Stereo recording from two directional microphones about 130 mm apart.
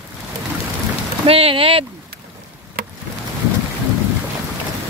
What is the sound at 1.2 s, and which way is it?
Speech, 45° right (ahead or behind).